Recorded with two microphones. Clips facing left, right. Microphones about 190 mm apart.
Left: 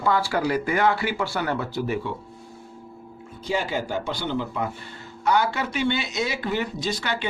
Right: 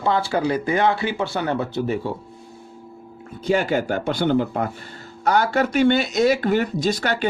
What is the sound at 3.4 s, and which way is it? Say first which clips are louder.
Speech: right 6 dB; 55° right (ahead or behind).